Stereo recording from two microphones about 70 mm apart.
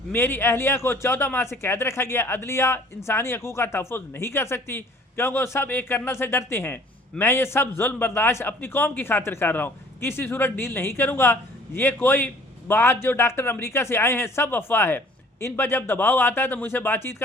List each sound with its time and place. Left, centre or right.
0.1 s a man's voice: left